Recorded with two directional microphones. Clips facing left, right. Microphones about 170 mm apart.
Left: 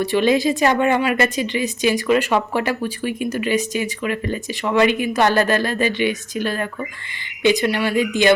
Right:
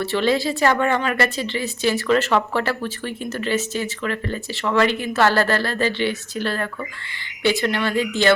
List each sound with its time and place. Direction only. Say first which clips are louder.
0.0 s a woman's voice: left 3 dB; 15° left (ahead or behind)